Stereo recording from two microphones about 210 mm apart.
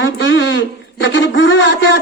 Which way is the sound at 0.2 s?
60° left (ahead or behind).